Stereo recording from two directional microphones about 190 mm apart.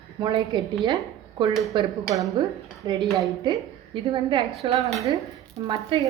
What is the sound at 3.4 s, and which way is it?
A woman's voice, 25° right (ahead or behind).